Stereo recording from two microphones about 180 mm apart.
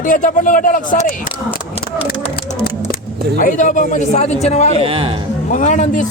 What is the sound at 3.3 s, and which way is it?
A man's voice, 45° left (ahead or behind).